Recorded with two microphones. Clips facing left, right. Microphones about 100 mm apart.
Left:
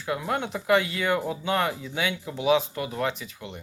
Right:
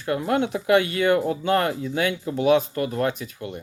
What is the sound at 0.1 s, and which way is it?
Speech, 55° right (ahead or behind).